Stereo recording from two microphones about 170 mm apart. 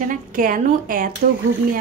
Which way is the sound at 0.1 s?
50° right (ahead or behind).